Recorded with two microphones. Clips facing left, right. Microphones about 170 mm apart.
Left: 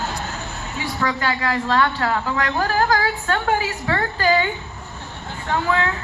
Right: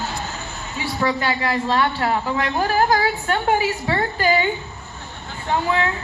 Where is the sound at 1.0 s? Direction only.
15° right (ahead or behind).